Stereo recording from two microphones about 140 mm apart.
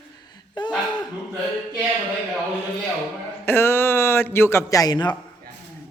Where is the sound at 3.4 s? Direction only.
15° left (ahead or behind).